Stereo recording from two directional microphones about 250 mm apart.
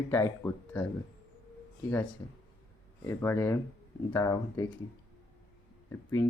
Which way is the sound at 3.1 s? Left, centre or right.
Centre.